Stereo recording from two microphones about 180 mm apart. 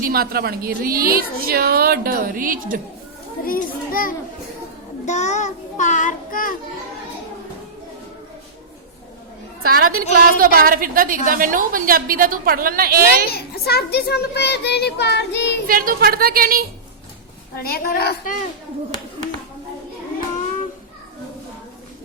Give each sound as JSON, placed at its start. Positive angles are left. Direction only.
{"t": 0.0, "sound": "a woman's voice", "side_deg": -55}
{"t": 3.4, "sound": "a child's voice", "side_deg": 50}
{"t": 5.0, "sound": "a child's voice", "side_deg": 40}
{"t": 9.6, "sound": "a woman's voice", "side_deg": -55}
{"t": 13.3, "sound": "a child's voice", "side_deg": 60}
{"t": 15.6, "sound": "a woman's voice", "side_deg": -50}
{"t": 17.6, "sound": "a child's voice", "side_deg": 55}